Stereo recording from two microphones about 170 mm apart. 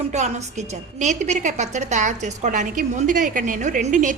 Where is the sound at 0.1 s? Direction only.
40° right (ahead or behind).